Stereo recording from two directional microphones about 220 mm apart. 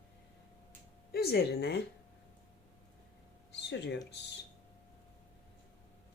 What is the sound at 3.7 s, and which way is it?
Speech, 50° left (ahead or behind).